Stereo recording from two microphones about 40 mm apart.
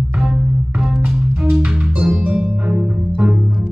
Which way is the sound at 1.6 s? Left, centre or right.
Right.